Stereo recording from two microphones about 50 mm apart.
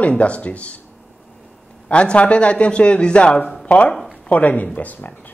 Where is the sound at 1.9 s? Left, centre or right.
Left.